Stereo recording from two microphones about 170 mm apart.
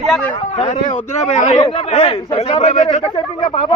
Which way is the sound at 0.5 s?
45° left (ahead or behind).